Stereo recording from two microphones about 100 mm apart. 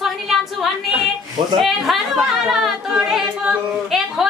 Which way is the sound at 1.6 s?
Centre (ahead or behind).